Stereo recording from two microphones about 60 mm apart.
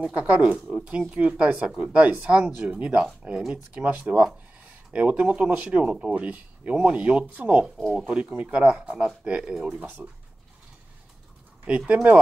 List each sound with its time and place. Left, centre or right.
0.0 s speech: centre
11.9 s speech: right